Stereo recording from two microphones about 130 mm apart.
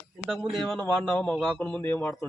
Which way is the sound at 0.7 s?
15° left (ahead or behind).